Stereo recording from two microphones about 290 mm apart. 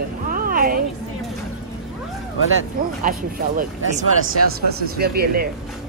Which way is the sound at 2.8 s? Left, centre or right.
Right.